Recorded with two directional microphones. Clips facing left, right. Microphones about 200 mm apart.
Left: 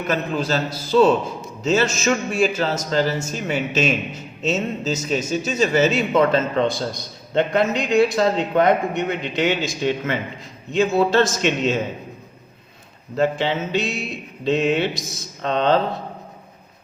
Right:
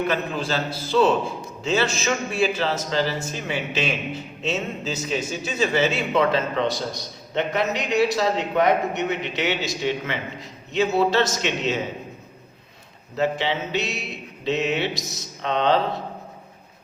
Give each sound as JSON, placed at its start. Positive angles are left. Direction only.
{"t": 0.1, "sound": "a man's voice", "side_deg": 40}
{"t": 13.1, "sound": "a man's voice", "side_deg": 50}